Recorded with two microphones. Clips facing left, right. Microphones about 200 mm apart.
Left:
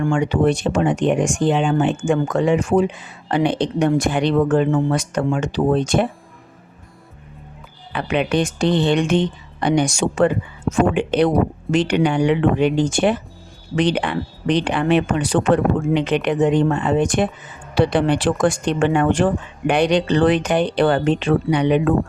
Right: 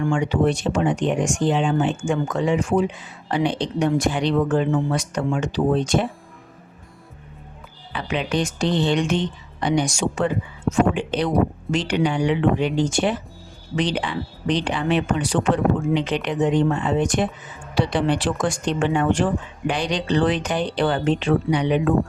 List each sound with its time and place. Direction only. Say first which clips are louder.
0.1 s speech: left 3 dB; 55° left (ahead or behind)
7.9 s speech: left 4 dB; 60° left (ahead or behind)